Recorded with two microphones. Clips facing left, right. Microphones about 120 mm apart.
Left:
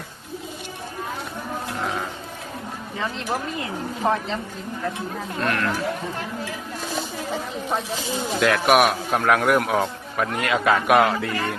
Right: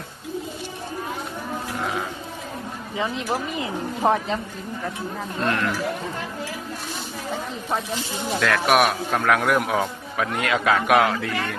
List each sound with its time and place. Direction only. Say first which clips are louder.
1.8 s sheep: even; centre (ahead or behind)
3.0 s speech: right 2 dB; 10° right (ahead or behind)
5.4 s speech: even; 20° right (ahead or behind)
8.4 s a man's voice: left 2 dB; centre (ahead or behind)